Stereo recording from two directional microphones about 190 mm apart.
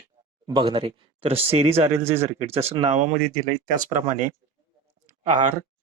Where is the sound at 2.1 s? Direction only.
15° right (ahead or behind).